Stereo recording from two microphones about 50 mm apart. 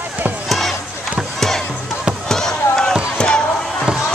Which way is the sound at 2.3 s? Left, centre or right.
Centre.